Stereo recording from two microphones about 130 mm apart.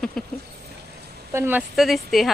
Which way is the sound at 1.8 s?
Centre (ahead or behind).